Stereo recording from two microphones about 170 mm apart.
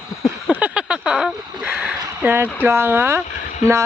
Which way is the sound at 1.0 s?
Centre (ahead or behind).